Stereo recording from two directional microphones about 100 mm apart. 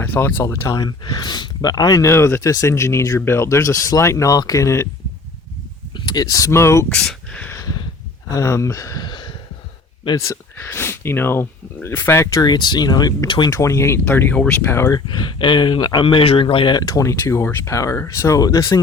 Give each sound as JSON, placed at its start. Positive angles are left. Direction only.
{"t": 0.0, "sound": "speech", "side_deg": 20}
{"t": 6.1, "sound": "speech", "side_deg": 40}
{"t": 6.9, "sound": "speech", "side_deg": 5}
{"t": 8.3, "sound": "speech", "side_deg": 30}
{"t": 9.0, "sound": "a sound", "side_deg": 50}
{"t": 10.2, "sound": "speech", "side_deg": 25}
{"t": 12.4, "sound": "speech", "side_deg": 45}
{"t": 13.2, "sound": "speech", "side_deg": 55}
{"t": 13.5, "sound": "speech", "side_deg": 30}
{"t": 14.9, "sound": "speech", "side_deg": 50}